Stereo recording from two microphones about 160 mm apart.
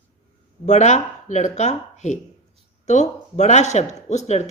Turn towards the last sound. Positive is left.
turn(degrees=45)  # may be behind; listen again after turning